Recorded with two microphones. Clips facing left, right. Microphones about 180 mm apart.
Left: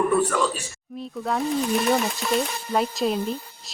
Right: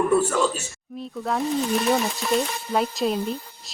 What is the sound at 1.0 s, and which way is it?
Speech, centre (ahead or behind).